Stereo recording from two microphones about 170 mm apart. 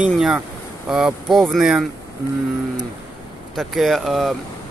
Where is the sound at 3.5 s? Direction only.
Centre (ahead or behind).